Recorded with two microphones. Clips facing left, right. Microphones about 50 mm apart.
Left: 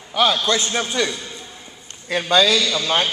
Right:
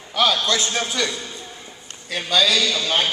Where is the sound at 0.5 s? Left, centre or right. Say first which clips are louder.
Left 2 dB; left.